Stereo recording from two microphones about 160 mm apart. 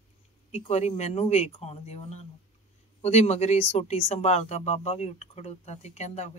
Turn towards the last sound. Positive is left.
turn(degrees=45)  # may be behind; listen again after turning